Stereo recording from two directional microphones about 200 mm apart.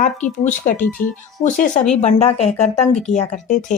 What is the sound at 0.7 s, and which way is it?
Speech, 40° left (ahead or behind).